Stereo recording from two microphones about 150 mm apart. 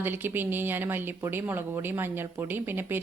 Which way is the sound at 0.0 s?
15° right (ahead or behind).